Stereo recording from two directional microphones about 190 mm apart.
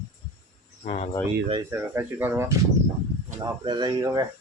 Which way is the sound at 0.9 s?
35° left (ahead or behind).